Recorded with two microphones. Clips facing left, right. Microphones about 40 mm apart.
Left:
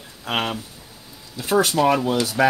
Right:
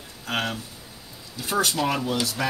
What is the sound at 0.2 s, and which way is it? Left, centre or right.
Speech, left.